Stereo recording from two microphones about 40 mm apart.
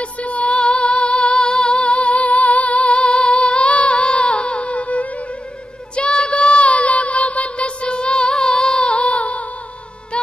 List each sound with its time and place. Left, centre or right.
0.0 s music: left
5.9 s a sound: left
10.1 s music: left